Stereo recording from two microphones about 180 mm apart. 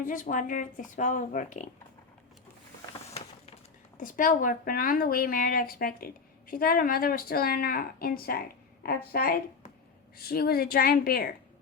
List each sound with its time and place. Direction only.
0.0 s speech: 45° left (ahead or behind)
3.9 s a woman's voice: 50° left (ahead or behind)